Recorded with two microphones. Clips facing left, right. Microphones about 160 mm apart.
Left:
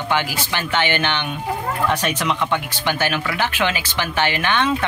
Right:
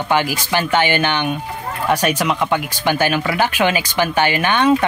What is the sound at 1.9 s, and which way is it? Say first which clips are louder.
Speech: right 8 dB; 10° right (ahead or behind).